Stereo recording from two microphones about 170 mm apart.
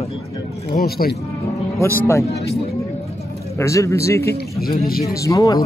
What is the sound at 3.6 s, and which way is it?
A man's voice, 15° left (ahead or behind).